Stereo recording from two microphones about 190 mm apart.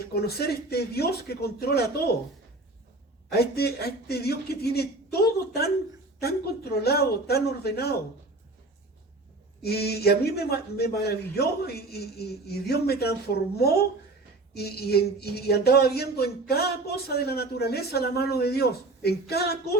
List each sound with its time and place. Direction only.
0.1 s speech: 55° left (ahead or behind)
3.3 s speech: 55° left (ahead or behind)
9.6 s speech: 55° left (ahead or behind)
14.5 s speech: 55° left (ahead or behind)